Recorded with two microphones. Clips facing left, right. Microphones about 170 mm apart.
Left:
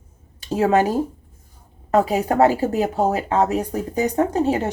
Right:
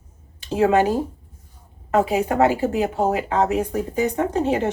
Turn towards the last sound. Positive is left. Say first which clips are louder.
# left 1 dB
turn(degrees=35)  # may be behind; listen again after turning